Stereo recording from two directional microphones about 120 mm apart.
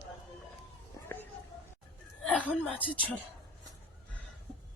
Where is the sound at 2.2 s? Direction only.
10° left (ahead or behind).